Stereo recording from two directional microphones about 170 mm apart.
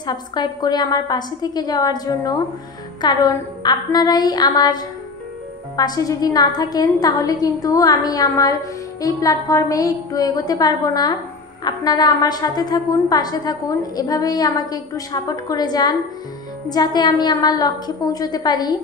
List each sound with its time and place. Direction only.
0.0 s a woman's voice: 25° left (ahead or behind)